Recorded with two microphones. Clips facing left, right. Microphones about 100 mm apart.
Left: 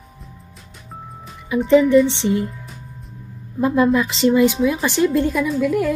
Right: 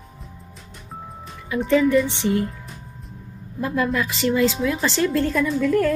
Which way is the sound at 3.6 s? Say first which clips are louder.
Left 6 dB; 20° left (ahead or behind).